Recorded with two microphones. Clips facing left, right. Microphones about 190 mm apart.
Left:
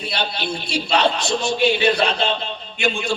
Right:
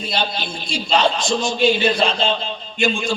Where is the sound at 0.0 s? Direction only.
65° left (ahead or behind).